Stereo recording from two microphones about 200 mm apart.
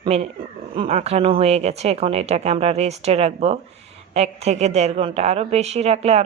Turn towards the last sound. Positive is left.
turn(degrees=-30)  # may be behind; listen again after turning